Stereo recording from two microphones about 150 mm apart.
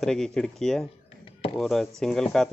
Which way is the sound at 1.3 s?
40° left (ahead or behind).